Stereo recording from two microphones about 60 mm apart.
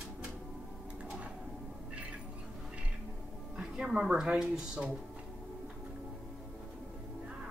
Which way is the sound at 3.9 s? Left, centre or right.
Centre.